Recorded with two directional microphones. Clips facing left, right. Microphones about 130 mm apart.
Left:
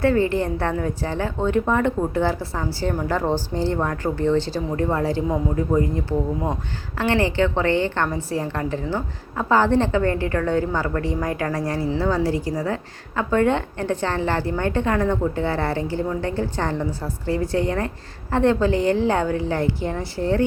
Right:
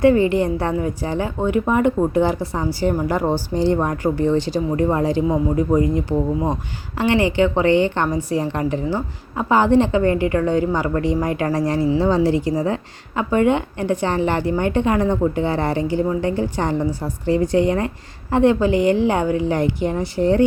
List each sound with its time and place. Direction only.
0.0 s a woman's voice: 15° right (ahead or behind)